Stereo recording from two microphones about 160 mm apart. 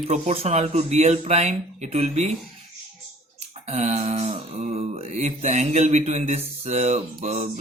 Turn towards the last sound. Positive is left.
turn(degrees=-40)  # may be behind; listen again after turning